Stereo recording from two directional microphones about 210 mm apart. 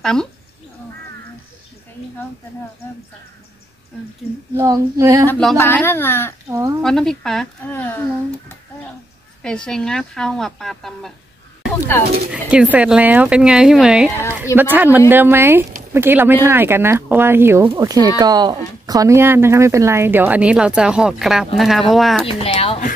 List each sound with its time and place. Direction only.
0.0 s speech: 5° left (ahead or behind)
4.6 s a woman's voice: 15° right (ahead or behind)
5.3 s speech: centre (ahead or behind)
9.4 s speech: 5° left (ahead or behind)
12.3 s a woman's voice: 5° right (ahead or behind)
22.4 s speech: 30° left (ahead or behind)